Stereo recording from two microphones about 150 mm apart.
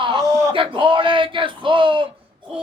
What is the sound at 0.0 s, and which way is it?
Speech, 35° right (ahead or behind).